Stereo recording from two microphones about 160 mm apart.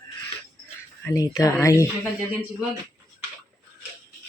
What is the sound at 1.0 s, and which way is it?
Speech, 20° left (ahead or behind).